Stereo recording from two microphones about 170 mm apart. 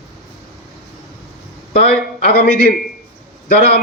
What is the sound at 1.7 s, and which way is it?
A man's voice, 65° left (ahead or behind).